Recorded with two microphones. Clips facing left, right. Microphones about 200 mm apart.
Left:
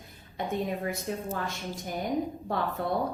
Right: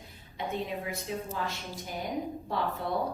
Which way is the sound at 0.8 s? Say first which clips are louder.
Left 3 dB; 50° left (ahead or behind).